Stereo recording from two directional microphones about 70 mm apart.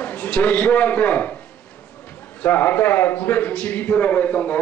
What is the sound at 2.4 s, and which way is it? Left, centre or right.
A man's voice, left.